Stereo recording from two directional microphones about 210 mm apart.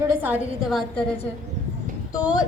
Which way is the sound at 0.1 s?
10° right (ahead or behind).